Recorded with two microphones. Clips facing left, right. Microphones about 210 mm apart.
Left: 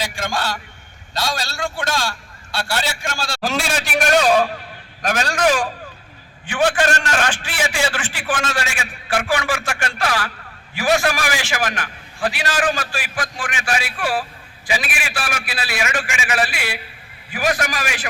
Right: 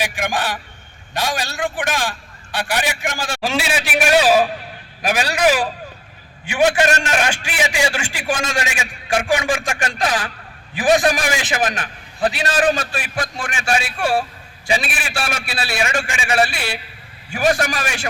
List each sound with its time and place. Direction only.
0.0 s a man's voice: 15° right (ahead or behind)
3.4 s a man's voice: centre (ahead or behind); by 18.0 s 30° right (ahead or behind)